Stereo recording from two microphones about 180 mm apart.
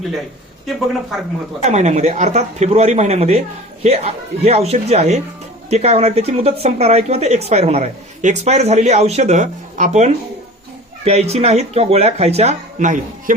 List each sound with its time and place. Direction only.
1.6 s speech: 40° right (ahead or behind)